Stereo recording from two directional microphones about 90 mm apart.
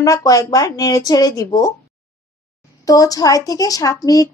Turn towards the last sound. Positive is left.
turn(degrees=40)  # may be behind; listen again after turning